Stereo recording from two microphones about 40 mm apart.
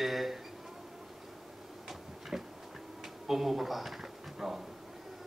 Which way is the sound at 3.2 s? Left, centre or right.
Centre.